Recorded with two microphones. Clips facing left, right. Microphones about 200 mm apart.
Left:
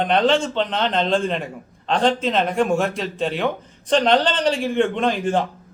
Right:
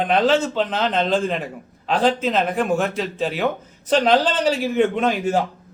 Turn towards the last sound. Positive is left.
turn(degrees=-5)  # may be behind; listen again after turning